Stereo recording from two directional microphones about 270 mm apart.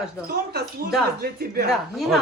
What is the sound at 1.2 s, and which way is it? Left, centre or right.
Speech, right.